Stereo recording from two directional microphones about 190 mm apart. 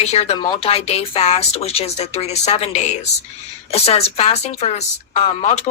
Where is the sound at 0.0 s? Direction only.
35° left (ahead or behind).